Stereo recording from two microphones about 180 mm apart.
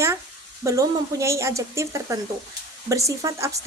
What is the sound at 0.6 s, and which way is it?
A woman's voice, 15° right (ahead or behind).